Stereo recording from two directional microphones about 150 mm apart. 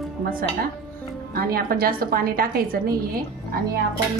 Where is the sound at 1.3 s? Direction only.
85° right.